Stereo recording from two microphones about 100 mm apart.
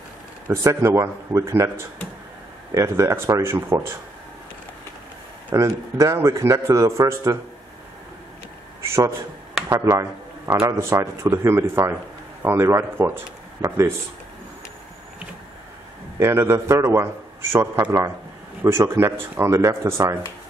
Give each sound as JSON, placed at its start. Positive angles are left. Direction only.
{"t": 0.5, "sound": "a man's voice", "side_deg": -25}
{"t": 5.6, "sound": "a man's voice", "side_deg": -30}
{"t": 8.8, "sound": "a man's voice", "side_deg": -30}
{"t": 16.2, "sound": "a man's voice", "side_deg": -25}